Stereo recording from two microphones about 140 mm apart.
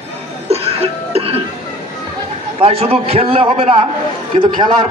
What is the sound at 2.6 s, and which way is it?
A man's voice, 45° right (ahead or behind).